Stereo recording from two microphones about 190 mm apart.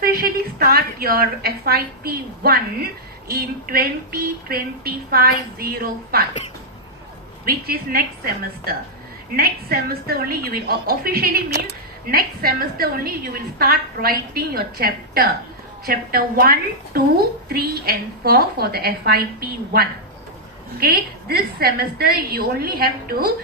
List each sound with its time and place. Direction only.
0.0 s a woman's voice: 50° right (ahead or behind)
7.4 s a woman's voice: 50° right (ahead or behind)
9.3 s a woman's voice: 50° right (ahead or behind)